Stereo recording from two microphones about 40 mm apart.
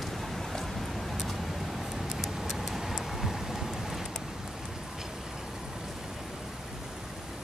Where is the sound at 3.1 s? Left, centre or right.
Centre.